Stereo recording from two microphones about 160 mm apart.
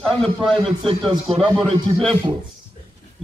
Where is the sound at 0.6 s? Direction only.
35° right (ahead or behind).